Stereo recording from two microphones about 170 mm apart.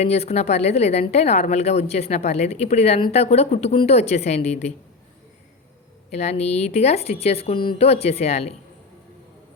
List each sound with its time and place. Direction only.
0.0 s a woman's voice: 40° left (ahead or behind)
6.1 s a woman's voice: 40° left (ahead or behind)